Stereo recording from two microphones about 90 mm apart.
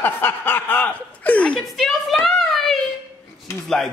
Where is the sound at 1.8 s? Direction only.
Centre (ahead or behind).